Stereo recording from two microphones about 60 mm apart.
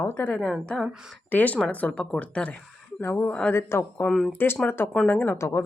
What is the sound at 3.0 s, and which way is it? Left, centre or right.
Speech, left.